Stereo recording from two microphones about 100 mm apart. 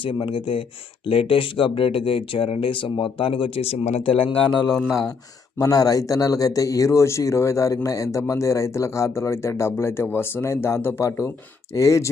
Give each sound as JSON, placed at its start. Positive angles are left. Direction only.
{"t": 0.0, "sound": "speech", "side_deg": 60}
{"t": 5.5, "sound": "speech", "side_deg": 35}